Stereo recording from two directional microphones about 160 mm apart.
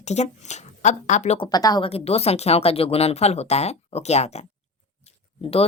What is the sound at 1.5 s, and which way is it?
Speech, 25° left (ahead or behind).